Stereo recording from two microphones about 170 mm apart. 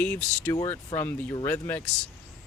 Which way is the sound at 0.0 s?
10° left (ahead or behind).